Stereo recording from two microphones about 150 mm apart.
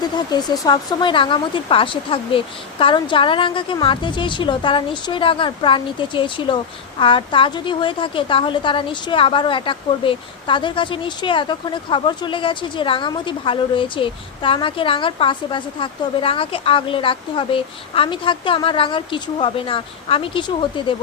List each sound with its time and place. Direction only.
0.0 s a woman's voice: 25° left (ahead or behind)